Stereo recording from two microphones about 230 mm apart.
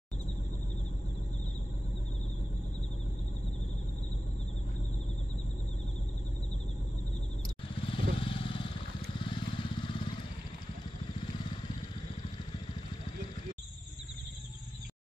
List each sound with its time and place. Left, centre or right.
7.9 s vehicle: left